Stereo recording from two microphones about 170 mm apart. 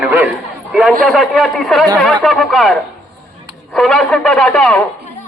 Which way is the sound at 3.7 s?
5° left (ahead or behind).